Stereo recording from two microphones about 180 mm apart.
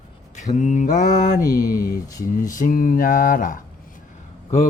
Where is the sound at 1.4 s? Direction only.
20° left (ahead or behind).